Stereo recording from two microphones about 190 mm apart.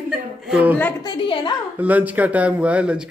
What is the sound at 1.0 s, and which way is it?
Speech, 25° left (ahead or behind).